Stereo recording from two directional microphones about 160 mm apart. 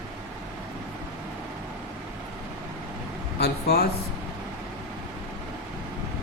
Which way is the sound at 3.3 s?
80° left.